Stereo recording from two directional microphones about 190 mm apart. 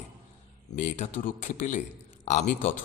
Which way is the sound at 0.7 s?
40° left (ahead or behind).